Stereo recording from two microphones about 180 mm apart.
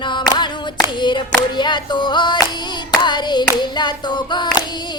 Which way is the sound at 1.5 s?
25° left (ahead or behind).